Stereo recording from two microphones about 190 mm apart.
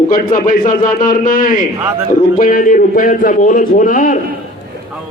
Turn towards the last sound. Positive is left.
turn(degrees=45)  # may be behind; listen again after turning